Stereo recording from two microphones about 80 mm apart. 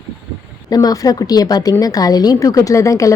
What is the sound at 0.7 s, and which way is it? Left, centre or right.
A woman's voice, left.